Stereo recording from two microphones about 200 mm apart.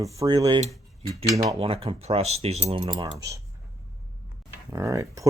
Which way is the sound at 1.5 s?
30° right (ahead or behind).